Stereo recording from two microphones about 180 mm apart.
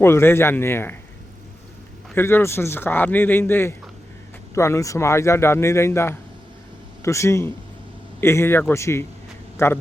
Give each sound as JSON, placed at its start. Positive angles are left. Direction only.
{"t": 0.0, "sound": "speech", "side_deg": 15}
{"t": 2.1, "sound": "speech", "side_deg": 15}